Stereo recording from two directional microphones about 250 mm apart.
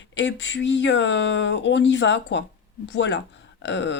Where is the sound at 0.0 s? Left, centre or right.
Left.